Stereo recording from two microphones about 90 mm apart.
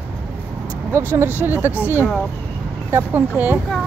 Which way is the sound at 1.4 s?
25° right (ahead or behind).